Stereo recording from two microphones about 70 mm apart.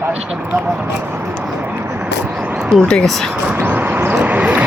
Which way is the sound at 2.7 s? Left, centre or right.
Centre.